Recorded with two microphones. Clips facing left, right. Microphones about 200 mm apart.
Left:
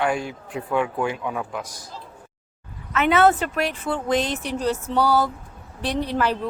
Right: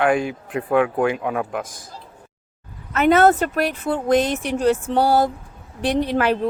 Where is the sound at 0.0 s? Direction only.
55° right (ahead or behind).